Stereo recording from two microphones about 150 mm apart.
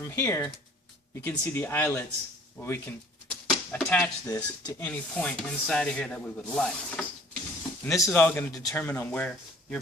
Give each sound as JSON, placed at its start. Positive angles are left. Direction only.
{"t": 0.0, "sound": "speech", "side_deg": 20}
{"t": 3.5, "sound": "speech", "side_deg": 5}
{"t": 4.3, "sound": "speech", "side_deg": 25}
{"t": 4.8, "sound": "speech", "side_deg": 10}
{"t": 7.9, "sound": "speech", "side_deg": 20}
{"t": 8.1, "sound": "speech", "side_deg": 10}